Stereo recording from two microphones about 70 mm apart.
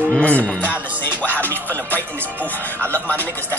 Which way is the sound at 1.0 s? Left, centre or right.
Left.